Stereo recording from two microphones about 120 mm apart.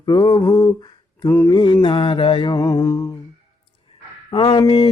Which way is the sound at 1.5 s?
40° left (ahead or behind).